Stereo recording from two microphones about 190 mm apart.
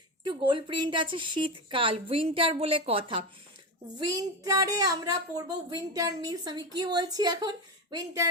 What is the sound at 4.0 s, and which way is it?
A woman's voice, 20° right (ahead or behind).